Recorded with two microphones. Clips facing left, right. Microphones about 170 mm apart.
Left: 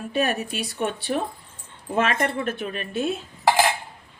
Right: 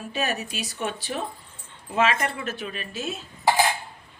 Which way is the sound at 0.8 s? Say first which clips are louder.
Left 4 dB; 55° left (ahead or behind).